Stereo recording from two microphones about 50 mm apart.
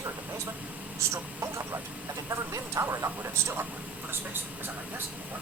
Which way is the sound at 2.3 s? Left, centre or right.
Right.